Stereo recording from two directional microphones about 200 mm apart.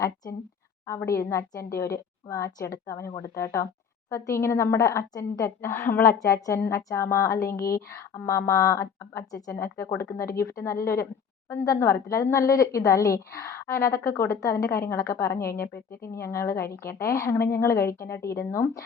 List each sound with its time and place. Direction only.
0.9 s a woman's voice: 15° left (ahead or behind)